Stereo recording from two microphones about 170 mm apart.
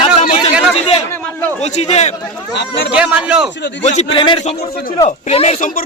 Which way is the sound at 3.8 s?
40° left (ahead or behind).